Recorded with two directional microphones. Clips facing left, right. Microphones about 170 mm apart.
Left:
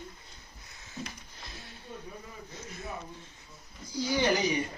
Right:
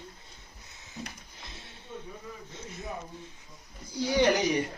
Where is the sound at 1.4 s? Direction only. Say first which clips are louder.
Left 1 dB; 25° right (ahead or behind).